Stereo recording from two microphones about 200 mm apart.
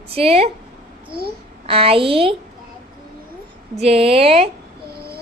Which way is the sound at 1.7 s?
30° right (ahead or behind).